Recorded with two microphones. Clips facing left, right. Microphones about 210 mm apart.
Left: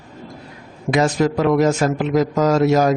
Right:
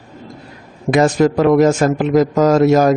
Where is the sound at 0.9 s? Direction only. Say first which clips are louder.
Right 4 dB; 50° right (ahead or behind).